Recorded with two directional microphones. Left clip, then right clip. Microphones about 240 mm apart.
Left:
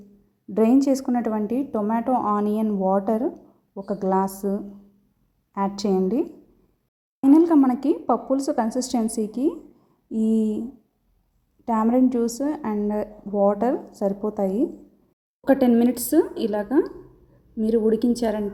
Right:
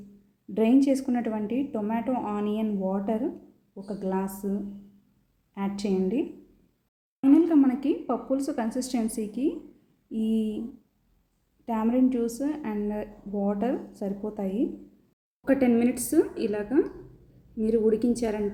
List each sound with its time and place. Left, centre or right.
0.5 s a woman's voice: left
5.5 s a woman's voice: left
11.6 s a woman's voice: left
16.5 s a woman's voice: centre